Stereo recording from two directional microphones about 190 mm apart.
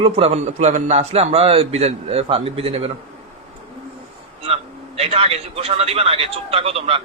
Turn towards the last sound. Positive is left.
turn(degrees=-30)  # may be behind; listen again after turning